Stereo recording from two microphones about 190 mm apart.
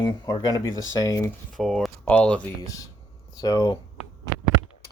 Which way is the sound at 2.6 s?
20° left (ahead or behind).